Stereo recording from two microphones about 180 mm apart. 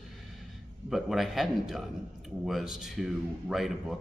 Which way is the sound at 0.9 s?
Centre (ahead or behind).